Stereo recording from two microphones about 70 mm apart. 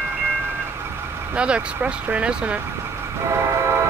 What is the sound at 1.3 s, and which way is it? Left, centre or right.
Speech, centre.